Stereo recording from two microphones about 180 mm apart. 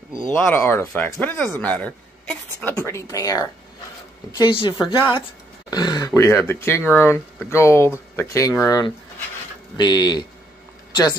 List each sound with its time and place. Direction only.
0.3 s a woman's voice: 10° left (ahead or behind)